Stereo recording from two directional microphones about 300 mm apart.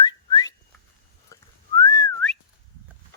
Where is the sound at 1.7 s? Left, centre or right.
Centre.